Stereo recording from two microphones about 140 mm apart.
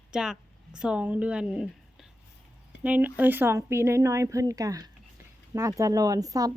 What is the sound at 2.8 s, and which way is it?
A woman's voice, 10° right (ahead or behind).